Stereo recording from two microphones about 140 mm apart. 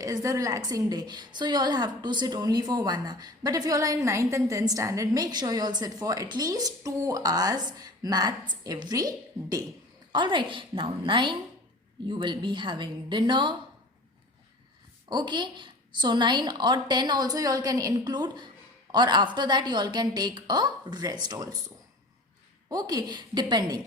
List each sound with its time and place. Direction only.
0.0 s a woman's voice: 25° right (ahead or behind)
15.1 s a woman's voice: 35° right (ahead or behind)
22.7 s a woman's voice: 25° right (ahead or behind)